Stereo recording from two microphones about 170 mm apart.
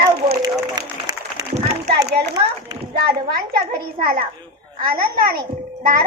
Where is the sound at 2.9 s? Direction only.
65° right (ahead or behind).